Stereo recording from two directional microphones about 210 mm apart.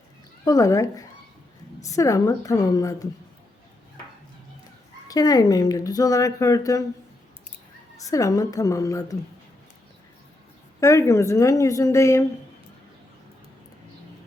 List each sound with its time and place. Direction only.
0.4 s speech: 15° left (ahead or behind)
5.0 s speech: 20° left (ahead or behind)
7.9 s speech: 15° left (ahead or behind)
10.8 s speech: 15° left (ahead or behind)